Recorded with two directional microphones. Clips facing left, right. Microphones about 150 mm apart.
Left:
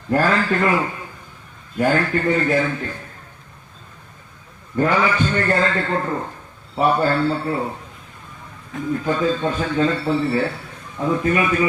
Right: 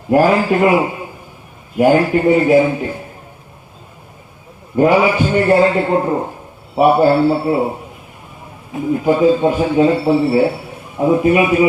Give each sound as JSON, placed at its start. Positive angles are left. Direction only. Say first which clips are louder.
{"t": 0.1, "sound": "a man's voice", "louder": "right 6 dB", "side_deg": -15}
{"t": 4.8, "sound": "a man's voice", "louder": "right 6 dB", "side_deg": -15}